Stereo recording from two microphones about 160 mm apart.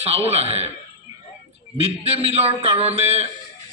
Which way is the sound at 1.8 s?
40° right (ahead or behind).